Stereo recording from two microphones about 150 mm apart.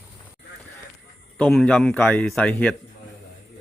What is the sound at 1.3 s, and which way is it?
Speech, 5° left (ahead or behind).